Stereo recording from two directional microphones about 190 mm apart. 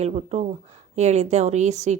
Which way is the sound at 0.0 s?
35° right (ahead or behind).